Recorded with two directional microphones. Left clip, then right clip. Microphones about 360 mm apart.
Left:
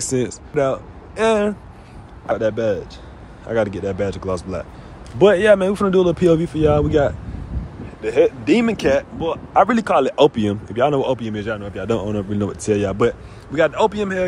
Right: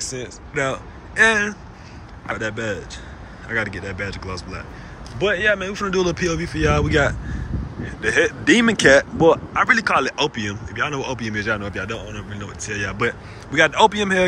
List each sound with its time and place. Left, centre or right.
0.0 s speech: left
0.6 s a man's voice: centre
9.6 s a man's voice: centre
12.2 s a man's voice: centre